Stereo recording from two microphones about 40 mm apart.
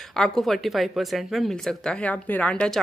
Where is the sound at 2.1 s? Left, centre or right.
Left.